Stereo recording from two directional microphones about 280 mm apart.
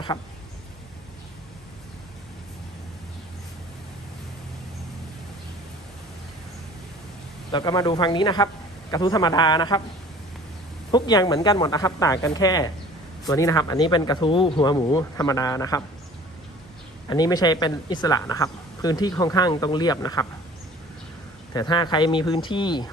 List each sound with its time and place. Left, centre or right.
7.5 s speech: centre
10.9 s speech: centre
17.1 s speech: centre
21.5 s speech: centre